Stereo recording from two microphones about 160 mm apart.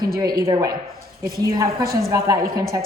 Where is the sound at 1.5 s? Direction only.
20° right (ahead or behind).